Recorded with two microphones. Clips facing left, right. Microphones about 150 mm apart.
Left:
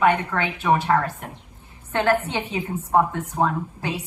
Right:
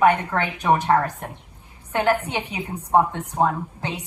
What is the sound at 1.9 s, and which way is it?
A woman's voice, 15° right (ahead or behind).